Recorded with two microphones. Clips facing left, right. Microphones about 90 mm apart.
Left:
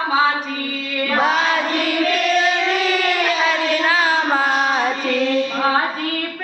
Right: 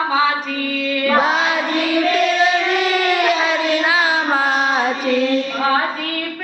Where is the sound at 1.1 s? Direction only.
15° right (ahead or behind).